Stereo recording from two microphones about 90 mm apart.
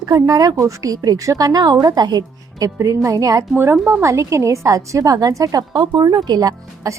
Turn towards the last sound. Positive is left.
turn(degrees=-45)  # may be behind; listen again after turning